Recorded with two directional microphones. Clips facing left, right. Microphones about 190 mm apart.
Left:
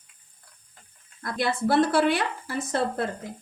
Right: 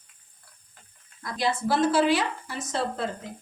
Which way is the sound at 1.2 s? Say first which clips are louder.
Left 1 dB; 55° left (ahead or behind).